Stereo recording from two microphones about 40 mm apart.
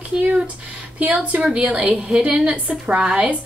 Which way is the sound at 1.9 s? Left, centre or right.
Right.